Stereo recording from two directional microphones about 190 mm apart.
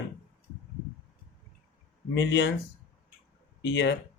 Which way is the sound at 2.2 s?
70° left (ahead or behind).